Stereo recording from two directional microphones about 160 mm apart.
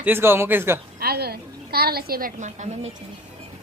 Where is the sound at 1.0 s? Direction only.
75° right (ahead or behind); by 2.9 s 50° right (ahead or behind).